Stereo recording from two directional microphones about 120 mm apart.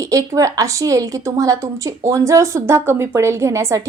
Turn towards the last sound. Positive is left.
turn(degrees=-25)  # may be behind; listen again after turning